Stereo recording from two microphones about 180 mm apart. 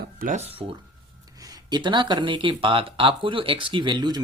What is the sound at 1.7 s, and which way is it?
Speech, 25° right (ahead or behind).